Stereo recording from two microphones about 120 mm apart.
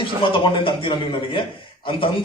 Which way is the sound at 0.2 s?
45° left (ahead or behind).